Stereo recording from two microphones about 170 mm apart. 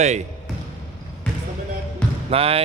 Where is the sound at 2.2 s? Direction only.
35° right (ahead or behind).